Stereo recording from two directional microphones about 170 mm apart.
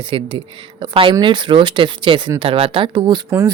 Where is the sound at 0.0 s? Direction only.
30° right (ahead or behind).